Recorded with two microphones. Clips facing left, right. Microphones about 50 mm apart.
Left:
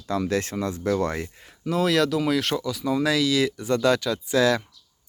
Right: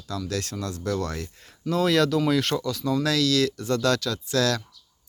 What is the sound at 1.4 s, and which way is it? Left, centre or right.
Speech, centre.